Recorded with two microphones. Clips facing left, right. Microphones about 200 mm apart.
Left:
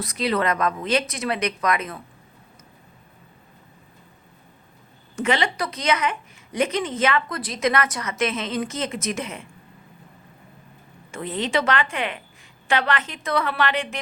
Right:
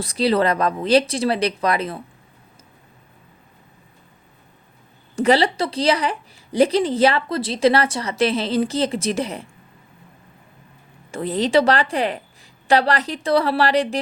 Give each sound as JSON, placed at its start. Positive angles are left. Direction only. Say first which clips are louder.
{"t": 0.0, "sound": "speech", "louder": "right 5 dB", "side_deg": -30}
{"t": 5.1, "sound": "speech", "louder": "right 6 dB", "side_deg": -35}
{"t": 11.1, "sound": "speech", "louder": "right 7 dB", "side_deg": -35}